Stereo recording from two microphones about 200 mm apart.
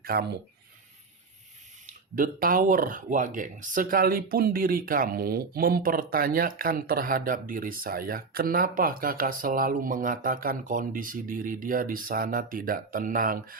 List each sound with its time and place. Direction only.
0.0 s speech: 50° right (ahead or behind)
1.9 s speech: 45° right (ahead or behind)